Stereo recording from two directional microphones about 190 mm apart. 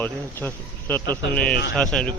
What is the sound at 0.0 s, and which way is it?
Speech, 10° left (ahead or behind).